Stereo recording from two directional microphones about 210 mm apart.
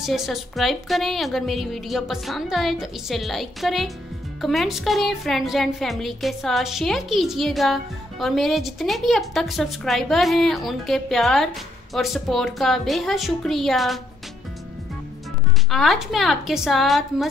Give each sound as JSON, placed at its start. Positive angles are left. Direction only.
{"t": 0.0, "sound": "speech", "side_deg": 0}
{"t": 15.7, "sound": "speech", "side_deg": 0}